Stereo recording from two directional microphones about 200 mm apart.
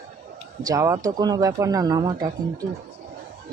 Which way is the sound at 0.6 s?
15° right (ahead or behind).